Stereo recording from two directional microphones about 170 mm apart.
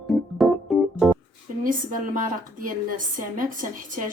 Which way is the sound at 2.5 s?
55° right (ahead or behind).